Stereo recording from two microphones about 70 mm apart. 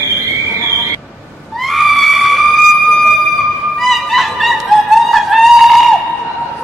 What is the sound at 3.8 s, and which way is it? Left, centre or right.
Music, centre.